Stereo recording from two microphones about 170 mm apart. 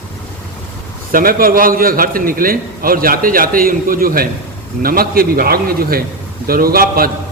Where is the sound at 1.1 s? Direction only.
60° right (ahead or behind).